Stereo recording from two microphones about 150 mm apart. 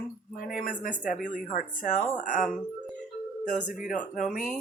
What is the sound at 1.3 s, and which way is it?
Speech, 60° left (ahead or behind).